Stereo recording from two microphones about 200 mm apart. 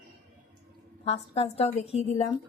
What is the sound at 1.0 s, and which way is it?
A woman's voice, 30° left (ahead or behind).